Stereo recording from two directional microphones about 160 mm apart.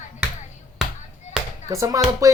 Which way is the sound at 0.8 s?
Centre (ahead or behind).